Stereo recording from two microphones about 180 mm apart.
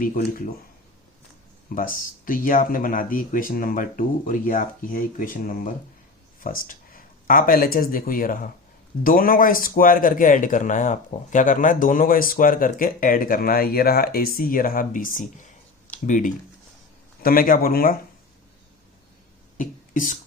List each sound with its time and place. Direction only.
0.0 s speech: 50° left (ahead or behind)
1.7 s speech: 50° left (ahead or behind)
19.5 s beatboxing: 45° left (ahead or behind)